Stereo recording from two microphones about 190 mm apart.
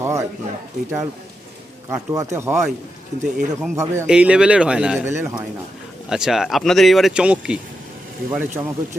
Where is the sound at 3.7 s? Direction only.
15° right (ahead or behind).